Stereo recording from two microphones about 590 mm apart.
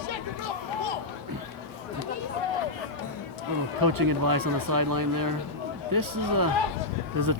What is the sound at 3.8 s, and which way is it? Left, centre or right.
Speech, right.